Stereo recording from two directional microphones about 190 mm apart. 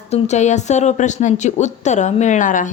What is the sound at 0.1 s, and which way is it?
A woman's voice, 35° left (ahead or behind).